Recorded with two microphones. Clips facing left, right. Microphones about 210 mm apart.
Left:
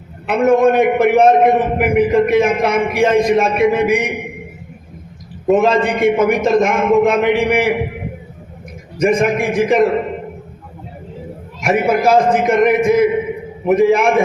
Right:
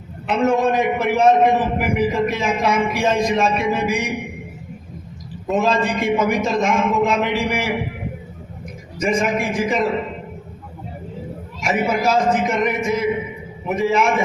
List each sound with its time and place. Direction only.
0.3 s a man's voice: 55° left (ahead or behind)
5.5 s a man's voice: 55° left (ahead or behind)
9.0 s a man's voice: 55° left (ahead or behind)
11.6 s a man's voice: 55° left (ahead or behind)